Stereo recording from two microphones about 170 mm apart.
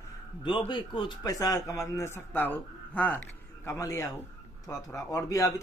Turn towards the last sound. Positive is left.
turn(degrees=20)  # may be behind; listen again after turning